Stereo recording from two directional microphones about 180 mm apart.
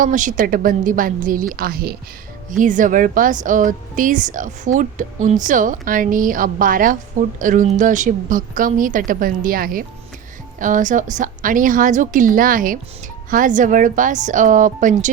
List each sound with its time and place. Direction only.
0.0 s a woman's voice: 45° right (ahead or behind)
2.5 s a woman's voice: 45° right (ahead or behind)